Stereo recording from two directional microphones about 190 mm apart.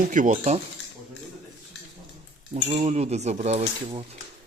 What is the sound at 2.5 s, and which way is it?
Speech, 35° right (ahead or behind).